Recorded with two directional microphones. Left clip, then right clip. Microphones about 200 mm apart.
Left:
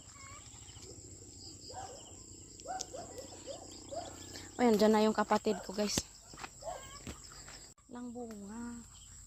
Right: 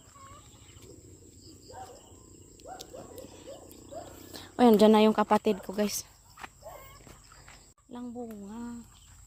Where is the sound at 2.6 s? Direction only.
30° right (ahead or behind).